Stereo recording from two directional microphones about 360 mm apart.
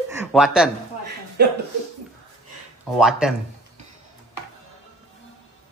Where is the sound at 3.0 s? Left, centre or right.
Centre.